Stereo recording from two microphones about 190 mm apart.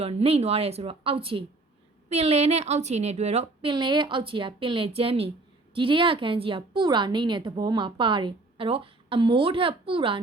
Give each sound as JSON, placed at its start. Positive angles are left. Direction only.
{"t": 0.0, "sound": "a woman's voice", "side_deg": -30}